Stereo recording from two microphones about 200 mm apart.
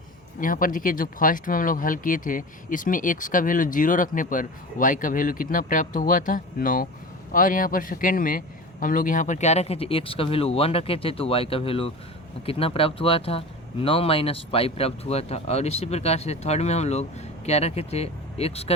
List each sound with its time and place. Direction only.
0.3 s a man's voice: 40° left (ahead or behind)